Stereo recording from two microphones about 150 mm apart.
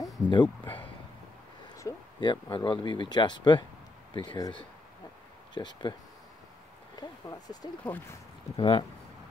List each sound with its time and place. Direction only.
0.3 s speech: 30° left (ahead or behind)
1.8 s a sound: 20° left (ahead or behind)
2.2 s speech: 30° left (ahead or behind)
7.0 s speech: 25° left (ahead or behind)
7.8 s speech: 10° left (ahead or behind)
8.5 s speech: 35° left (ahead or behind)